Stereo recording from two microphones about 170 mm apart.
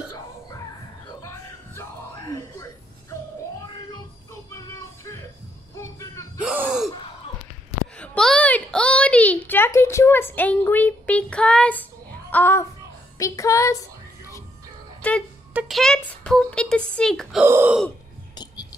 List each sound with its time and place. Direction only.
0.1 s music: 20° left (ahead or behind)
5.8 s a sound: 15° left (ahead or behind)
6.4 s gasp: 5° right (ahead or behind)
8.0 s a sound: 5° left (ahead or behind)
12.3 s speech: 10° left (ahead or behind)
15.0 s speech: 5° left (ahead or behind)
17.4 s speech: 10° right (ahead or behind)
18.3 s whispering: 25° left (ahead or behind)